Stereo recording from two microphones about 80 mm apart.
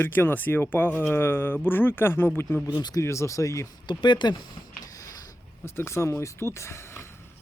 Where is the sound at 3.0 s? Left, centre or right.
Left.